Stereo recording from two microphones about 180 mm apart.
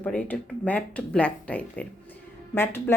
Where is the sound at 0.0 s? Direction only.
10° left (ahead or behind).